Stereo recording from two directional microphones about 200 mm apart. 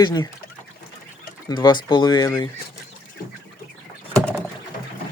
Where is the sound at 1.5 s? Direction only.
20° left (ahead or behind).